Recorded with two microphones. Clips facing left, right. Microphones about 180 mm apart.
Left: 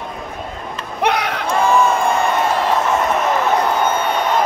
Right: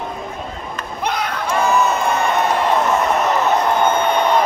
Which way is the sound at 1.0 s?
70° left (ahead or behind).